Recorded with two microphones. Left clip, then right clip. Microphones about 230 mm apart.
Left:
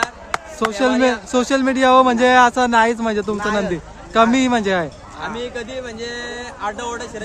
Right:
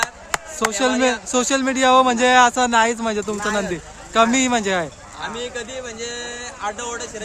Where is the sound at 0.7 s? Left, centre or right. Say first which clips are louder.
Left 2 dB; centre.